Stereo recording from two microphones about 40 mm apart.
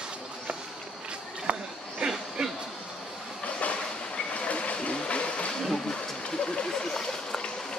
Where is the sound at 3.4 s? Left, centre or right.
Left.